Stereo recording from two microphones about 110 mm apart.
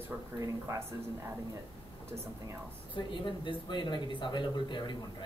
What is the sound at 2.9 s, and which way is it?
Speech, 45° left (ahead or behind).